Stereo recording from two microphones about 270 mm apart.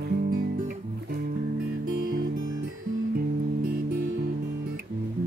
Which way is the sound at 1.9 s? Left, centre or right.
Right.